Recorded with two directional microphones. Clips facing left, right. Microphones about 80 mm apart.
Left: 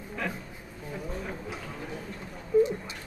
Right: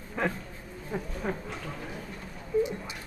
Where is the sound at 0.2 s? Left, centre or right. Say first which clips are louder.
Right 4 dB; right.